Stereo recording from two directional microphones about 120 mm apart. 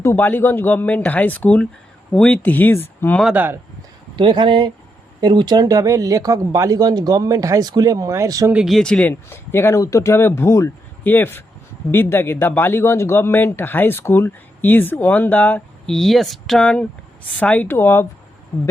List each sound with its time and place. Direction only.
0.0 s speech: 20° left (ahead or behind)
3.3 s speech: 15° right (ahead or behind)
4.1 s speech: 40° right (ahead or behind)
8.6 s speech: 5° left (ahead or behind)
9.3 s speech: 20° left (ahead or behind)
16.0 s speech: centre (ahead or behind); by 18.0 s 20° left (ahead or behind)